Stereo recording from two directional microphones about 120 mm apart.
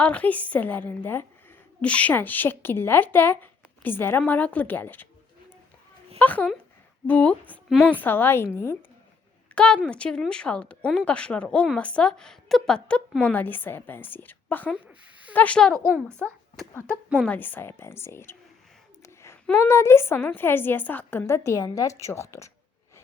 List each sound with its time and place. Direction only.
0.0 s speech: 10° left (ahead or behind)
6.1 s speech: 15° left (ahead or behind)
8.0 s a woman's voice: 15° left (ahead or behind)
9.6 s speech: 10° left (ahead or behind)
14.7 s a sound: 10° right (ahead or behind)
15.3 s a child's voice: 10° left (ahead or behind)
19.0 s a sound: 25° left (ahead or behind)
19.6 s a woman's voice: 20° left (ahead or behind)